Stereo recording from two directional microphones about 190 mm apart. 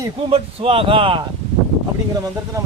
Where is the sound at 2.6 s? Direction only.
15° right (ahead or behind).